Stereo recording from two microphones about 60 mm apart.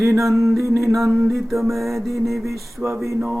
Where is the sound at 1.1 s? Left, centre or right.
Right.